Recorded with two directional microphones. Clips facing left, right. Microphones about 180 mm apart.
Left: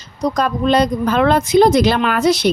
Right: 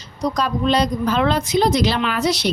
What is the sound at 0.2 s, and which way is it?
A woman's voice, 50° left (ahead or behind).